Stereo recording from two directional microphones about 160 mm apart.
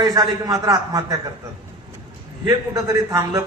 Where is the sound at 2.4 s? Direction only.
25° right (ahead or behind).